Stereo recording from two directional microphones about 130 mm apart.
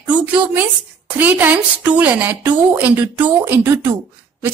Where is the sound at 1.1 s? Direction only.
15° right (ahead or behind).